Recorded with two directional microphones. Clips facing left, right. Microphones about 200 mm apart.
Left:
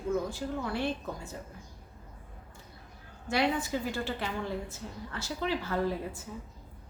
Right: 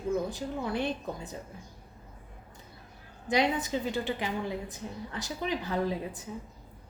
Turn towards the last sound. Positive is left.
turn(degrees=-15)  # may be behind; listen again after turning